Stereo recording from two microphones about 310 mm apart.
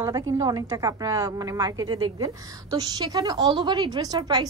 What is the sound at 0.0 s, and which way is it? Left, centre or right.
A woman's voice, centre.